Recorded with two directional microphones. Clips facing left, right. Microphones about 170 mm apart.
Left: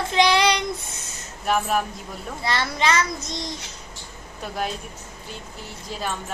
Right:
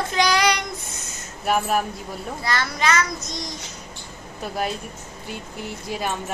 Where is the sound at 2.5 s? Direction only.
25° left (ahead or behind).